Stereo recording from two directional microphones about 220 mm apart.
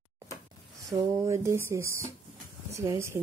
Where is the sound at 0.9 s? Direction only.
15° right (ahead or behind).